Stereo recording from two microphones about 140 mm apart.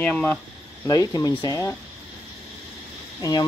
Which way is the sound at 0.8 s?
25° left (ahead or behind).